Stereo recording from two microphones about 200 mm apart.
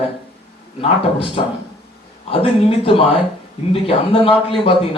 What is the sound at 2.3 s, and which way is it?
A man's voice, 30° left (ahead or behind).